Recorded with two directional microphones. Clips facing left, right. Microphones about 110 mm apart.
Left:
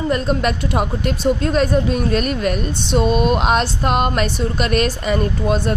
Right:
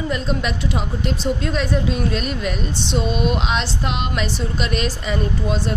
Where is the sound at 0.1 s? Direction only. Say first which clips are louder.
Left 5 dB; 50° left (ahead or behind).